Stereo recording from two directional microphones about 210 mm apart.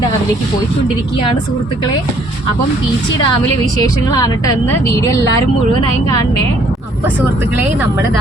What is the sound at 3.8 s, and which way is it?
A woman's voice, 20° left (ahead or behind).